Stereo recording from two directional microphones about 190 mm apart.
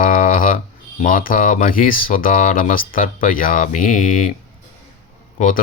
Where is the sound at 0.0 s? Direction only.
45° left (ahead or behind).